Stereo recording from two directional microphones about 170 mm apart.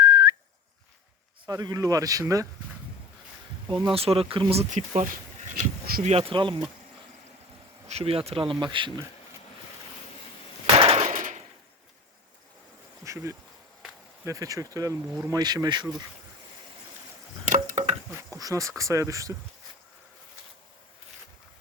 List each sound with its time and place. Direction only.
0.0 s whistling: 25° right (ahead or behind)
1.5 s speech: 20° right (ahead or behind)
3.9 s speech: 35° right (ahead or behind)
6.3 s speech: 30° right (ahead or behind)
7.9 s speech: 35° right (ahead or behind)
10.8 s a sound: 35° right (ahead or behind)
11.1 s a sound: 50° right (ahead or behind)
13.1 s bee: 15° right (ahead or behind)
14.3 s speech: 20° right (ahead or behind)
17.4 s a sound: 50° right (ahead or behind)
18.1 s a sound: 15° right (ahead or behind)
18.8 s speech: 20° right (ahead or behind)